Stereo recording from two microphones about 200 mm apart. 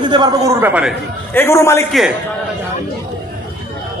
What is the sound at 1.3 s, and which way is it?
Speech, 10° left (ahead or behind).